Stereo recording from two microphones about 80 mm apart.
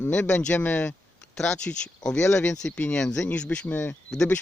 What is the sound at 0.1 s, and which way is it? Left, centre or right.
Speech, centre.